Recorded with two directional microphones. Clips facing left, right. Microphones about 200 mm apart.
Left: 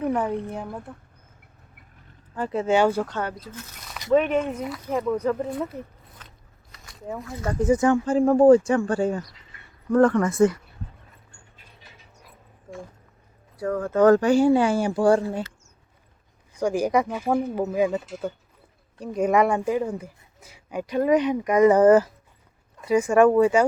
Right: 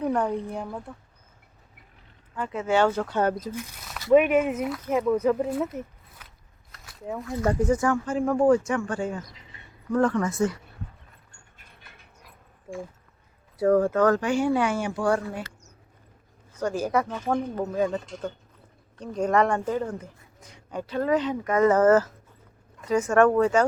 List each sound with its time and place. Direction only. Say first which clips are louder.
0.0 s speech: left 1 dB; 5° left (ahead or behind)
2.3 s speech: left 5 dB; 35° left (ahead or behind)
2.6 s speech: left 2 dB; 10° left (ahead or behind)
3.5 s speech: right 4 dB; 10° right (ahead or behind)
6.2 s biting: left 2 dB; 10° right (ahead or behind)
6.7 s a sound: even; centre (ahead or behind)
7.7 s speech: left 4 dB; 20° left (ahead or behind)
9.3 s a sound: right 2 dB; 20° right (ahead or behind)
9.9 s speech: left 5 dB; 55° left (ahead or behind)
11.5 s a sound: even; 55° right (ahead or behind)
13.7 s speech: right 7 dB; 40° right (ahead or behind)
14.0 s speech: left 6 dB; 35° left (ahead or behind)
16.6 s speech: left 3 dB; 15° left (ahead or behind)